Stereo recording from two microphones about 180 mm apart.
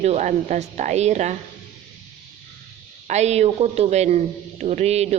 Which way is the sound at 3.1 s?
40° right (ahead or behind).